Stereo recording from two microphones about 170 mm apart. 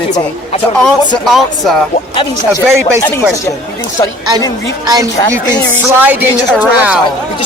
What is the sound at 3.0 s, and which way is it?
Speech, 15° left (ahead or behind).